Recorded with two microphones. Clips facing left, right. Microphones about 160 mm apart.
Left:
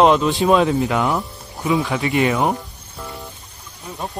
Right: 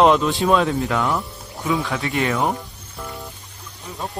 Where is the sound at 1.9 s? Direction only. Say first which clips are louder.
Left 4 dB; centre (ahead or behind).